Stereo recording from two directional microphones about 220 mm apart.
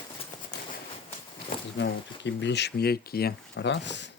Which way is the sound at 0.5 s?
50° left (ahead or behind).